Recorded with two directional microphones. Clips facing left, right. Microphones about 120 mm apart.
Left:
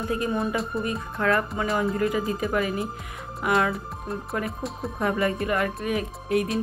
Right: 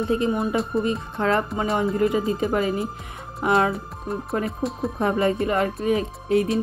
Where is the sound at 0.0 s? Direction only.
25° right (ahead or behind).